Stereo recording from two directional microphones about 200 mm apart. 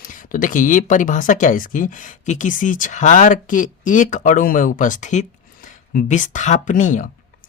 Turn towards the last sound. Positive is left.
turn(degrees=40)  # may be behind; listen again after turning